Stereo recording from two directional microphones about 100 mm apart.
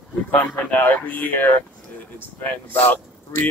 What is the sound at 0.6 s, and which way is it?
Speech, 15° left (ahead or behind).